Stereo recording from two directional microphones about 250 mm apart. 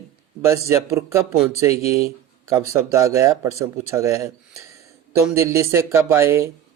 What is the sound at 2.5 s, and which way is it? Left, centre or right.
Speech, centre.